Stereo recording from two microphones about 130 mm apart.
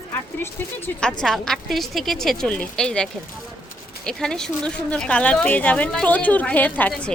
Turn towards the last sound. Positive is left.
turn(degrees=5)  # may be behind; listen again after turning